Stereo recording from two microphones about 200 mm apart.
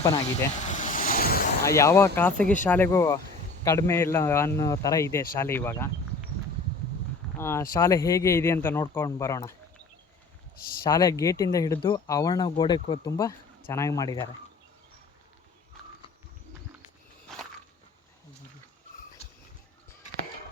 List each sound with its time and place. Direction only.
0.7 s vehicle: 40° left (ahead or behind)
1.6 s speech: 15° left (ahead or behind)
7.3 s speech: 15° left (ahead or behind)
10.8 s speech: 15° left (ahead or behind)